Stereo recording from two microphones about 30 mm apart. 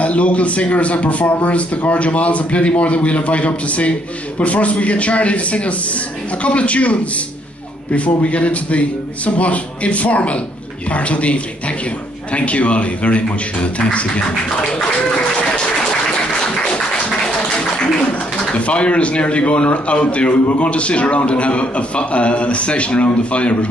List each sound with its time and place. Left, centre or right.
0.0 s speech: left
16.4 s music: left
18.5 s speech: left